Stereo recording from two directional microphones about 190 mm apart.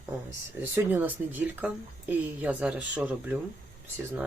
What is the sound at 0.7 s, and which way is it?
Speech, 10° right (ahead or behind).